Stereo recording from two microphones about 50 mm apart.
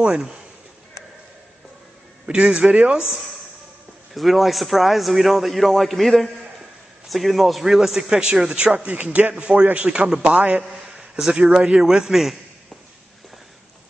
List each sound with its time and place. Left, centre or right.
0.0 s a man's voice: centre
2.2 s a man's voice: centre
4.1 s a man's voice: centre; by 10.6 s right
10.9 s a man's voice: centre